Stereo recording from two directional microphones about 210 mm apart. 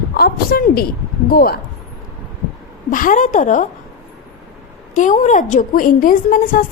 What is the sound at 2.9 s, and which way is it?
Speech, 40° left (ahead or behind).